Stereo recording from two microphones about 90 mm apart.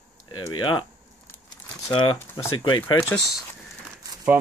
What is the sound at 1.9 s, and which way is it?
Speech, 75° left (ahead or behind).